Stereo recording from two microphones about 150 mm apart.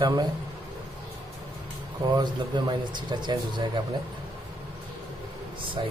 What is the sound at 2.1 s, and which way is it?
Speech, 30° right (ahead or behind).